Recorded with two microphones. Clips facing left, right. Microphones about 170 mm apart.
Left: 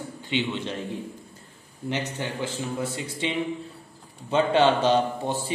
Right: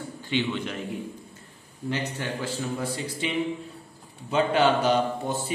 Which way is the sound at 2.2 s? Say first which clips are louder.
Even; 20° left (ahead or behind).